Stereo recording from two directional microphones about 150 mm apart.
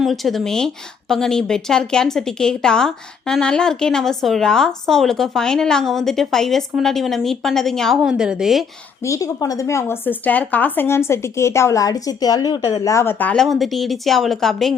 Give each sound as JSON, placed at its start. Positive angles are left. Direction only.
{"t": 0.0, "sound": "speech", "side_deg": 0}
{"t": 9.0, "sound": "speech", "side_deg": 20}